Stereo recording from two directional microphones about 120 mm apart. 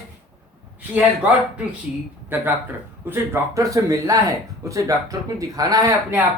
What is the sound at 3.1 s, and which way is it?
Speech, 25° right (ahead or behind).